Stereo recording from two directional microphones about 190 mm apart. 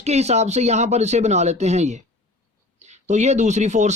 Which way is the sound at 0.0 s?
35° right (ahead or behind).